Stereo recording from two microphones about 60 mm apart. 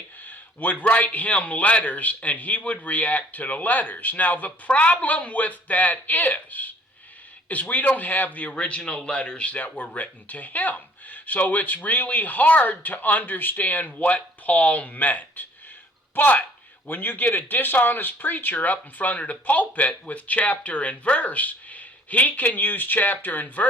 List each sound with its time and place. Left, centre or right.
0.2 s a man's voice: left